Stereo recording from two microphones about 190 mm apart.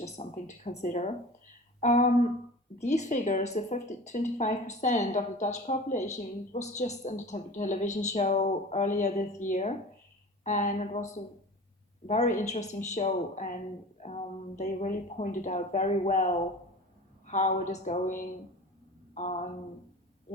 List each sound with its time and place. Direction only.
0.0 s a woman's voice: 35° left (ahead or behind)